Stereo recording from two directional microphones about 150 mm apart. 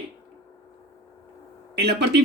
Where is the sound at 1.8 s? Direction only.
90° right.